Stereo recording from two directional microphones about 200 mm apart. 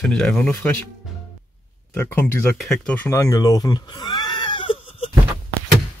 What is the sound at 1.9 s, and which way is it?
Speech, 10° left (ahead or behind).